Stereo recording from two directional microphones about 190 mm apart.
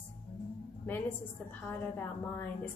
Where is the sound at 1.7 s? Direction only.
10° left (ahead or behind).